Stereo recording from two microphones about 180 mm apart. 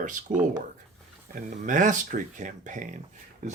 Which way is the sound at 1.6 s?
45° right (ahead or behind).